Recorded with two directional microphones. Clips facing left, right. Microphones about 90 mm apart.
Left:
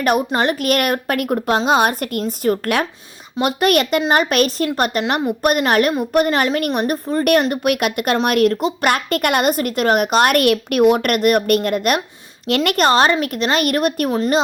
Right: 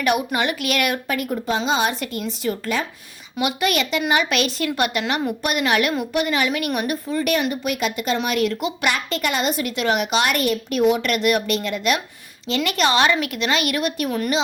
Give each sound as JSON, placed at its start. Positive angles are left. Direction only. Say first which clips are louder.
{"t": 0.0, "sound": "a woman's voice", "louder": "left 4 dB", "side_deg": 45}
{"t": 7.5, "sound": "a woman's voice", "louder": "left 5 dB", "side_deg": 60}